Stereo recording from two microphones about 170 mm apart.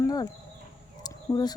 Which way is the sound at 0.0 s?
20° left (ahead or behind).